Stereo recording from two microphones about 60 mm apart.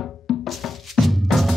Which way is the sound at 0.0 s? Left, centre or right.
Centre.